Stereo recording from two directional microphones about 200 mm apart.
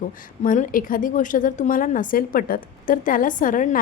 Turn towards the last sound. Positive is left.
turn(degrees=40)  # may be behind; listen again after turning